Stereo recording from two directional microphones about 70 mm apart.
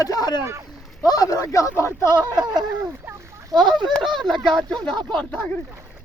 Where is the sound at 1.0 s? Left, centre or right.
Left.